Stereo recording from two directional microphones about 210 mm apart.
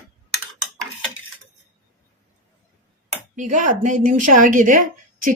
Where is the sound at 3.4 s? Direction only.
35° right (ahead or behind).